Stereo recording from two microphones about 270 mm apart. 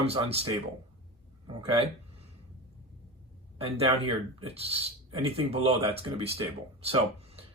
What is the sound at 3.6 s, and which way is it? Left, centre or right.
Speech, centre.